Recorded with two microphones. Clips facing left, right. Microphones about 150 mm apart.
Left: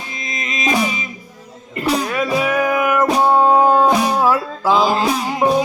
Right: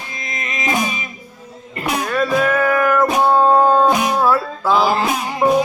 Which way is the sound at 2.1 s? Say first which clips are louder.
Right 1 dB; 10° left (ahead or behind).